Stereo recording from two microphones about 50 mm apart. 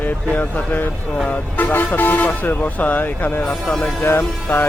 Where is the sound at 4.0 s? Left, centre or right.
Left.